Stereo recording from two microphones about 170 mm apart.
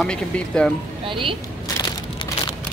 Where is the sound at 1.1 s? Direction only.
30° right (ahead or behind).